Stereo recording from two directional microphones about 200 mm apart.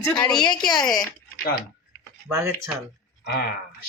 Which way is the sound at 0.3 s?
20° left (ahead or behind).